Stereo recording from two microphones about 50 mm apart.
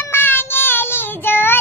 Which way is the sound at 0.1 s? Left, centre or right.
Left.